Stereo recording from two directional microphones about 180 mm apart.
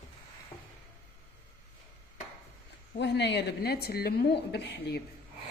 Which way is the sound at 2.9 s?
70° left (ahead or behind).